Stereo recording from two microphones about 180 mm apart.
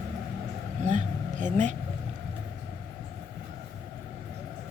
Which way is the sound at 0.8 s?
45° right (ahead or behind).